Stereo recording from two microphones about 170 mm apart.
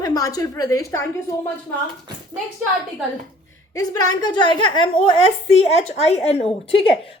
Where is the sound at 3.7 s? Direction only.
20° left (ahead or behind).